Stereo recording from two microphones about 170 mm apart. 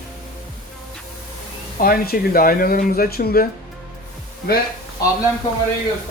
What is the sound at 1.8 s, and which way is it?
Speech, 60° left (ahead or behind).